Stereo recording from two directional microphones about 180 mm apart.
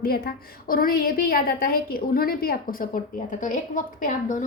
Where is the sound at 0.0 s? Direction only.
55° left (ahead or behind).